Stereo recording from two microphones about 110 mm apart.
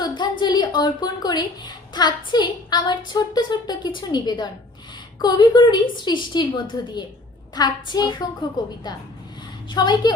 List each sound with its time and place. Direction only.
0.0 s a woman's voice: 45° left (ahead or behind)